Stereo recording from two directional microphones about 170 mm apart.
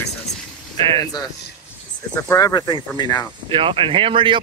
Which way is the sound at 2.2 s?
20° left (ahead or behind).